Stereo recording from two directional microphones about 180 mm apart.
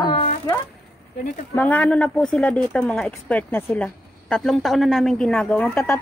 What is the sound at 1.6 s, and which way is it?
A woman's voice, 10° left (ahead or behind).